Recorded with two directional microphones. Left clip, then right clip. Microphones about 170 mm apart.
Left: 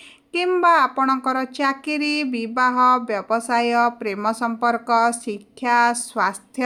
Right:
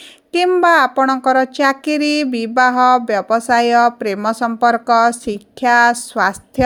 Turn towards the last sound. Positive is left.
turn(degrees=-35)  # may be behind; listen again after turning